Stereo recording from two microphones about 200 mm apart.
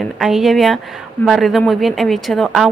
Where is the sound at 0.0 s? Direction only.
Centre (ahead or behind).